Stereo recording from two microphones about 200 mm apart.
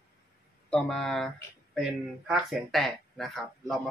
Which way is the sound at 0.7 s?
Centre (ahead or behind).